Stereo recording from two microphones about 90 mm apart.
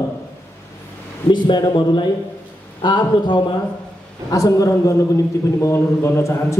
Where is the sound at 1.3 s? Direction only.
60° left (ahead or behind).